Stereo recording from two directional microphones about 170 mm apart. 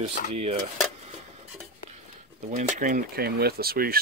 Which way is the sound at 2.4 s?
45° right (ahead or behind).